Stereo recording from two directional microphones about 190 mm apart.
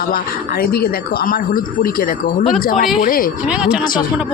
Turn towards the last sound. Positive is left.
turn(degrees=-5)  # may be behind; listen again after turning